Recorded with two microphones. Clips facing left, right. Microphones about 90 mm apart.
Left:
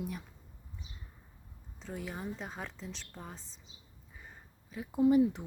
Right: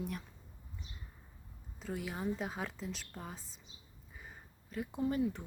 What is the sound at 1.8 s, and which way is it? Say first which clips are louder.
Speech: right 2 dB; 5° right (ahead or behind).